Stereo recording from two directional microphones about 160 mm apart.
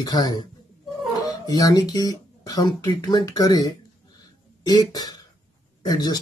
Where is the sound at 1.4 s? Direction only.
25° left (ahead or behind).